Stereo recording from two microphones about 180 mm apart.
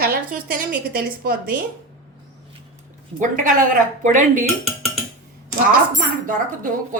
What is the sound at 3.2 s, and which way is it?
Speech, 45° right (ahead or behind).